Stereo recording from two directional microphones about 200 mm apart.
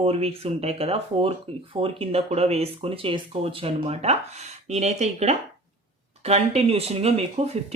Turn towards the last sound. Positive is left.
turn(degrees=-30)  # may be behind; listen again after turning